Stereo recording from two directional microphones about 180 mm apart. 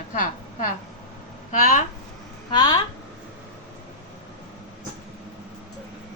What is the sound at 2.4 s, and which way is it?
Speech, 25° left (ahead or behind).